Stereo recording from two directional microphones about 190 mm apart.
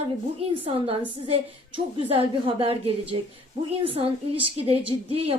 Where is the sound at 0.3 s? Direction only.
30° right (ahead or behind).